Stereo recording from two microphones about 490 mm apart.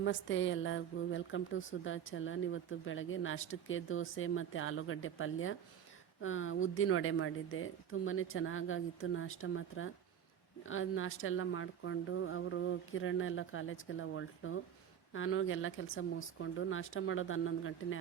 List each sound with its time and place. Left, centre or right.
0.0 s speech: left